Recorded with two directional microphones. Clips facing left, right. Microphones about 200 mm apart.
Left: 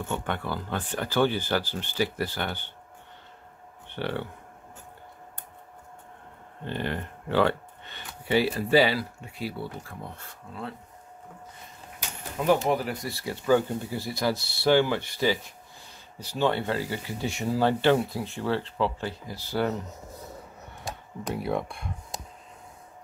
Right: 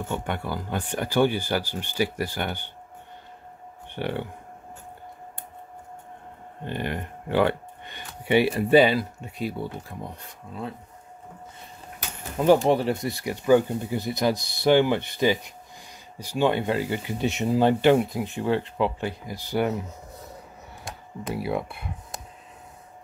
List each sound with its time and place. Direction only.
0.0 s speech: 10° right (ahead or behind)
3.9 s speech: 15° right (ahead or behind)
6.6 s speech: 15° right (ahead or behind)
12.6 s speech: 30° right (ahead or behind)
20.8 s computer keyboard: centre (ahead or behind)